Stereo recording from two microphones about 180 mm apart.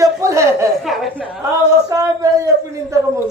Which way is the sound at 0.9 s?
Centre (ahead or behind).